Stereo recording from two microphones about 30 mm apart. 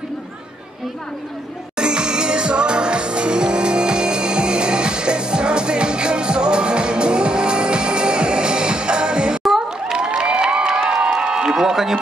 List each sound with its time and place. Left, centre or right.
1.8 s music: right
9.4 s music: centre
9.9 s a sound: right; by 12.0 s centre